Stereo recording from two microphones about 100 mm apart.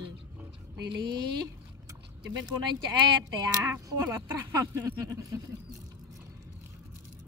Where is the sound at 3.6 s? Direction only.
30° right (ahead or behind).